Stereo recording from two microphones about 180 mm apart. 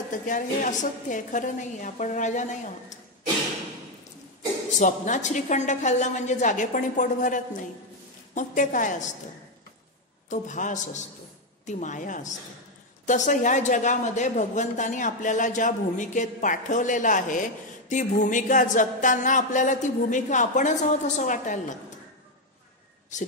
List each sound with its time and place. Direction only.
0.1 s speech: 45° left (ahead or behind)
4.7 s speech: 45° left (ahead or behind)
10.3 s speech: 45° left (ahead or behind)